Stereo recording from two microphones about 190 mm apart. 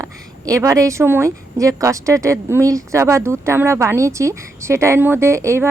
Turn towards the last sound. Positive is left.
turn(degrees=-15)  # may be behind; listen again after turning